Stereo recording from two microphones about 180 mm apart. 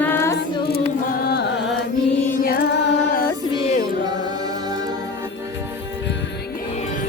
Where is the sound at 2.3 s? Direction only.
55° left (ahead or behind).